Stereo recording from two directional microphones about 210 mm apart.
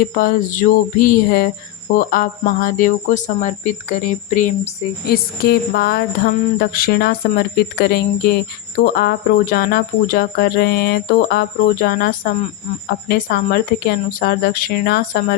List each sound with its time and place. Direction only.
0.2 s speech: 40° left (ahead or behind)